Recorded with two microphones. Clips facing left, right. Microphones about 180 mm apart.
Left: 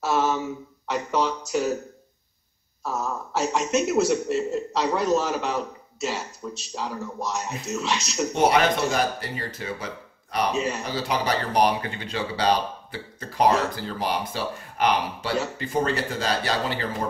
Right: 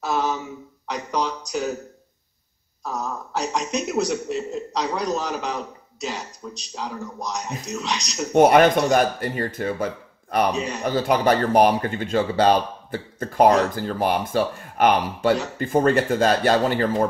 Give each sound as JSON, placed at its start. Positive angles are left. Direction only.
{"t": 0.0, "sound": "a sound", "side_deg": 0}
{"t": 2.8, "sound": "a man's voice", "side_deg": 0}
{"t": 8.3, "sound": "speech", "side_deg": -55}
{"t": 10.5, "sound": "a man's voice", "side_deg": 0}
{"t": 10.8, "sound": "speech", "side_deg": -50}